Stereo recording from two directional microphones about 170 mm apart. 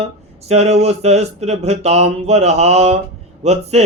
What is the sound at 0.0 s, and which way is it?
Speech, 40° right (ahead or behind).